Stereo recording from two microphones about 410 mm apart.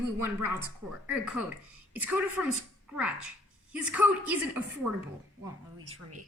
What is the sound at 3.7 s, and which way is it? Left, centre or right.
Speech, centre.